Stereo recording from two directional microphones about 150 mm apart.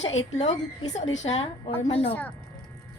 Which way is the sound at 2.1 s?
10° left (ahead or behind).